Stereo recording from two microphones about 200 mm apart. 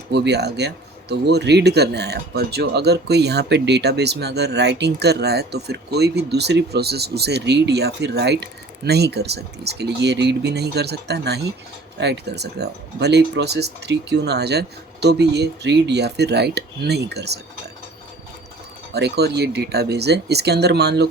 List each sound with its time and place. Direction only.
0.1 s speech: 55° right (ahead or behind)
18.9 s speech: 55° right (ahead or behind)